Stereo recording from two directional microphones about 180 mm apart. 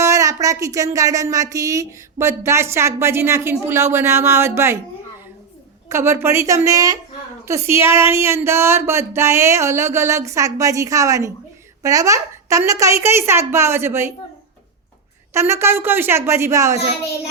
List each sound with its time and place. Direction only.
0.0 s speech: 15° right (ahead or behind)
5.9 s speech: 15° right (ahead or behind)
15.3 s speech: 15° right (ahead or behind)